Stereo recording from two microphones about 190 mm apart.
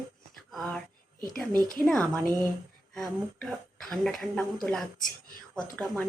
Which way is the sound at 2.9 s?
Centre (ahead or behind).